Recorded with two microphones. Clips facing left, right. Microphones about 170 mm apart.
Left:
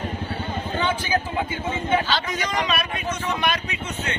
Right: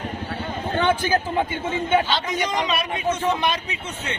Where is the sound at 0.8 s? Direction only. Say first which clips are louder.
Right 5 dB; 50° right (ahead or behind).